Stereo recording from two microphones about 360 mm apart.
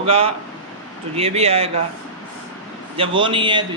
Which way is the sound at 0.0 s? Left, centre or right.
Centre.